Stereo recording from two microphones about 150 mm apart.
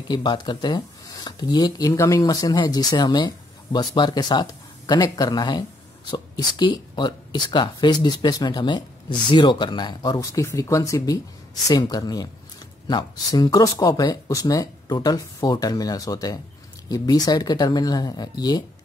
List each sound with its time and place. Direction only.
0.1 s speech: 30° left (ahead or behind)